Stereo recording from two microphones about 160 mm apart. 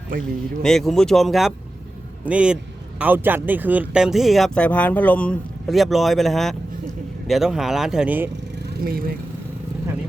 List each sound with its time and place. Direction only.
0.6 s a man's voice: centre (ahead or behind)
8.8 s speech: 70° right (ahead or behind)